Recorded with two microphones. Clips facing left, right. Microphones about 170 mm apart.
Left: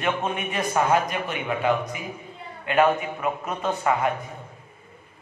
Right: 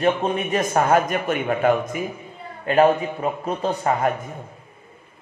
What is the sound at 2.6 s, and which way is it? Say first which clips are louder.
A man's voice: right 4 dB; 35° right (ahead or behind).